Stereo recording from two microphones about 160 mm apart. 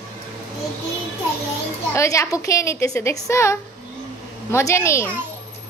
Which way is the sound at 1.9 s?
20° left (ahead or behind).